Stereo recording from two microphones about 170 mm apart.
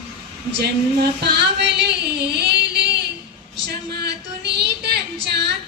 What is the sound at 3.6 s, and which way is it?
Female singing, 75° right (ahead or behind).